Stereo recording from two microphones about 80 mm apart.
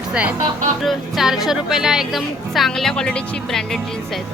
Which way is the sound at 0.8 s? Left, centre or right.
Centre.